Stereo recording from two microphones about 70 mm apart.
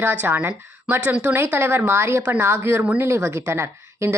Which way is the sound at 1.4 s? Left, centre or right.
Right.